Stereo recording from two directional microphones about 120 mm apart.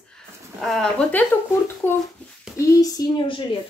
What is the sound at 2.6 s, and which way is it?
Speech, 30° left (ahead or behind).